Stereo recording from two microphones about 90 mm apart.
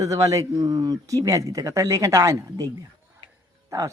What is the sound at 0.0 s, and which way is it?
Speech, 35° right (ahead or behind).